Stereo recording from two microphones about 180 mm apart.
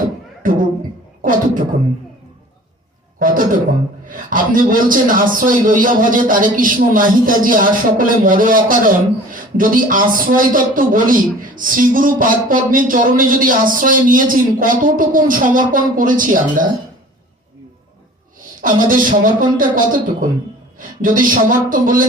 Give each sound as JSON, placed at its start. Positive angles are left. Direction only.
{"t": 1.2, "sound": "a man's voice", "side_deg": -50}
{"t": 3.2, "sound": "a man's voice", "side_deg": -50}
{"t": 18.6, "sound": "a man's voice", "side_deg": -50}